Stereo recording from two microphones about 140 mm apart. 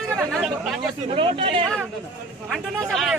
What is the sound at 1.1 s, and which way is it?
Speech, 40° right (ahead or behind).